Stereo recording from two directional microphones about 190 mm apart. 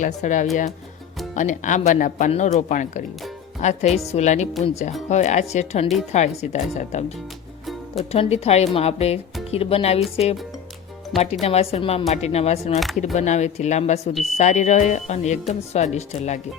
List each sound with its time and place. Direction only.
0.0 s speech: 40° left (ahead or behind)
8.1 s speech: 35° left (ahead or behind)
11.1 s speech: centre (ahead or behind)
11.4 s speech: 30° left (ahead or behind)